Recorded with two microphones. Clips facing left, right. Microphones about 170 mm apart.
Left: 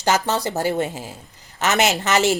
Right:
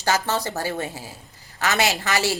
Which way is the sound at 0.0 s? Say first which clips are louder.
Left 3 dB; 20° left (ahead or behind).